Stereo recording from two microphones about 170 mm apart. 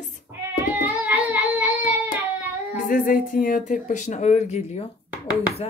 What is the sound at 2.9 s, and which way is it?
Speech, 55° left (ahead or behind).